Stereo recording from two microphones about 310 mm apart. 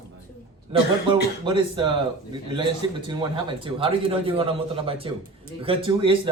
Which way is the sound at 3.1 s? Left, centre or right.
Centre.